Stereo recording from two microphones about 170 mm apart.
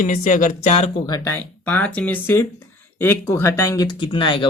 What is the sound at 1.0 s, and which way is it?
Speech, 20° left (ahead or behind).